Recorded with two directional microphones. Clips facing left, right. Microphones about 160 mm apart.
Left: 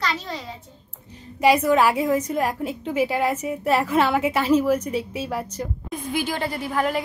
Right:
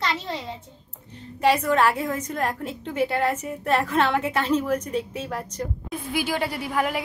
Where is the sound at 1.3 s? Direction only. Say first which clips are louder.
Left 3 dB; 10° left (ahead or behind).